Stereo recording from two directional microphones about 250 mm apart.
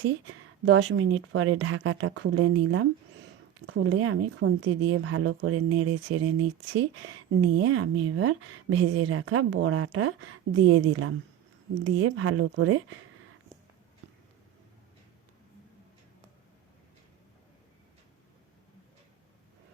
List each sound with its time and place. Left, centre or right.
0.0 s speech: right